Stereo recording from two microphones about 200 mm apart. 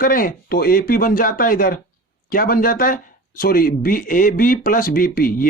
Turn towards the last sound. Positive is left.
turn(degrees=45)  # may be behind; listen again after turning